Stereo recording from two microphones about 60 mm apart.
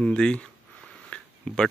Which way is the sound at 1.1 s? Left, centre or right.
Centre.